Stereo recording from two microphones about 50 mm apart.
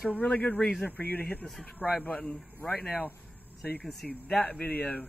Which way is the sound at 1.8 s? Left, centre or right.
Right.